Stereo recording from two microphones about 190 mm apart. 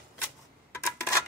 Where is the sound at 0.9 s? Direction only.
15° left (ahead or behind).